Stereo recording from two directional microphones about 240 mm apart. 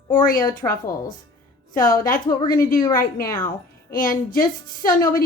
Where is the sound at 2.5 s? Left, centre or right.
Left.